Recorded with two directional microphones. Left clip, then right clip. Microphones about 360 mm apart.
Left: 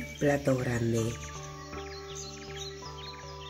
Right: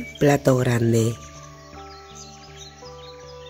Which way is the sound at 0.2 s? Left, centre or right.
Right.